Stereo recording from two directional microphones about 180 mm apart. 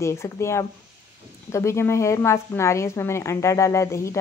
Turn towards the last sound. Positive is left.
turn(degrees=15)  # may be behind; listen again after turning